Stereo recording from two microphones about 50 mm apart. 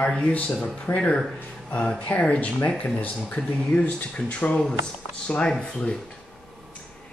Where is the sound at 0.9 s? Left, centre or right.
Left.